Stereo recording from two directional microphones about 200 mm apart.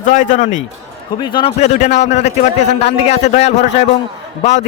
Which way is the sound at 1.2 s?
25° left (ahead or behind).